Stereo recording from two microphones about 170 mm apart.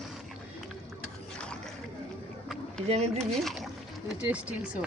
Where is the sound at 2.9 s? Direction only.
40° right (ahead or behind).